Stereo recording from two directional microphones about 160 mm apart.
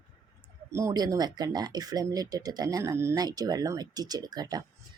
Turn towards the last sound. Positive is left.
turn(degrees=-25)  # may be behind; listen again after turning